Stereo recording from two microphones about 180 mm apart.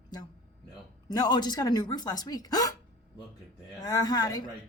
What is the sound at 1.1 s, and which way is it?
Speech, 20° left (ahead or behind).